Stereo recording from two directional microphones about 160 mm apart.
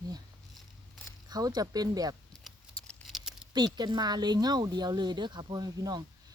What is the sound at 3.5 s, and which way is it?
Speech, 25° right (ahead or behind).